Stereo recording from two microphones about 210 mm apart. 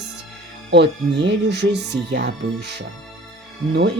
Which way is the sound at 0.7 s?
60° right (ahead or behind).